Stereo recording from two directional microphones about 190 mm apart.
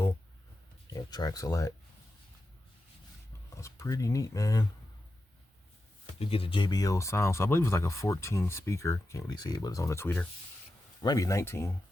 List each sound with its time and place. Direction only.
0.9 s speech: 20° left (ahead or behind)
3.5 s speech: 15° left (ahead or behind)
6.1 s speech: 30° left (ahead or behind); by 11.7 s 15° left (ahead or behind)